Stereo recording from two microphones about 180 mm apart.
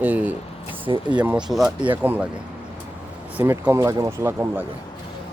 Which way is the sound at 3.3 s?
10° right (ahead or behind).